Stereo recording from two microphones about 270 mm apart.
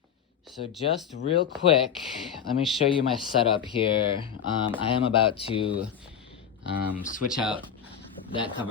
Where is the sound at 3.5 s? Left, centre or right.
Centre.